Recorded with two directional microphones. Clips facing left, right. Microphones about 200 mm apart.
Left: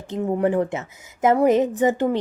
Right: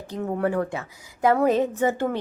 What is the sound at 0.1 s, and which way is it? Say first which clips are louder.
A woman's voice: left 4 dB; 15° left (ahead or behind).